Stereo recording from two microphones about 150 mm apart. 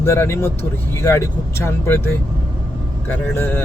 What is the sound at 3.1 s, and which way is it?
Speech, 15° left (ahead or behind).